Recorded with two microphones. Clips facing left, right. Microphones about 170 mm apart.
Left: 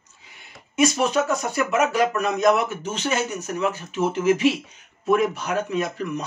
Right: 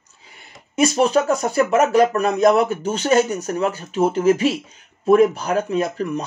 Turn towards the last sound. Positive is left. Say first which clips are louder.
# right 4 dB
turn(degrees=-35)  # may be behind; listen again after turning